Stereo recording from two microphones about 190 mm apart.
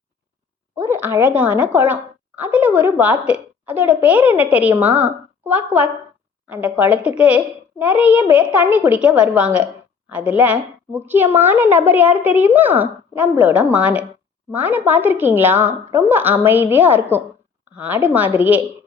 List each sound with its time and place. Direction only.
0.8 s a woman's voice: 10° right (ahead or behind)